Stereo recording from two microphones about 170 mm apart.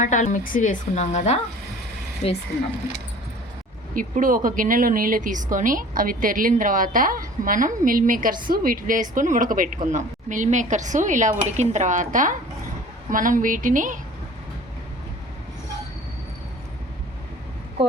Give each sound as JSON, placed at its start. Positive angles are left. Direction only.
{"t": 0.0, "sound": "a woman's voice", "side_deg": 45}
{"t": 3.9, "sound": "speech", "side_deg": -50}